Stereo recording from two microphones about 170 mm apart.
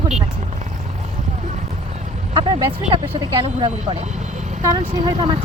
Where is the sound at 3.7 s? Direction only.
40° right (ahead or behind).